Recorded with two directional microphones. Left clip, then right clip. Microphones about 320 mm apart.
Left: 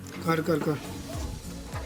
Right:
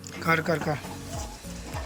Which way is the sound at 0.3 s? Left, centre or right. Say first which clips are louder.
Right 2 dB; centre.